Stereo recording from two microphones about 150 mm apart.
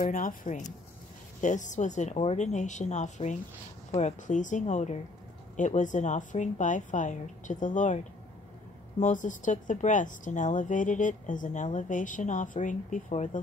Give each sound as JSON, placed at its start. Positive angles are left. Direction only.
{"t": 0.0, "sound": "a woman's voice", "side_deg": 65}
{"t": 9.0, "sound": "speech", "side_deg": 55}